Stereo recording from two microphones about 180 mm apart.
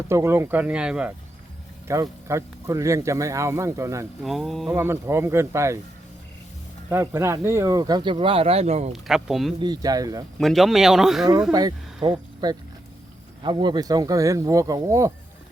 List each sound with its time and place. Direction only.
0.1 s speech: 15° right (ahead or behind)
1.9 s speech: 15° right (ahead or behind)
4.2 s speech: centre (ahead or behind)
4.7 s speech: 15° right (ahead or behind)
6.9 s speech: 15° right (ahead or behind); by 8.9 s 35° right (ahead or behind)
8.9 s speech: centre (ahead or behind)
9.6 s speech: 20° right (ahead or behind)
10.3 s speech: centre (ahead or behind)
12.0 s speech: 25° right (ahead or behind)